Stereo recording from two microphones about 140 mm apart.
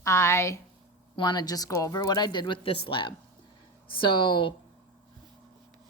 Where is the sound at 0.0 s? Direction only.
20° left (ahead or behind).